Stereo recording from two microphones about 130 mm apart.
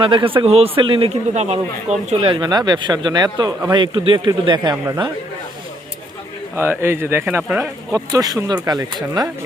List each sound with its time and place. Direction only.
0.0 s a man's voice: 40° right (ahead or behind); by 2.2 s 55° right (ahead or behind)
2.2 s speech: 35° right (ahead or behind)
6.6 s speech: 20° right (ahead or behind)
7.4 s speech: 5° right (ahead or behind)
7.9 s speech: 30° right (ahead or behind)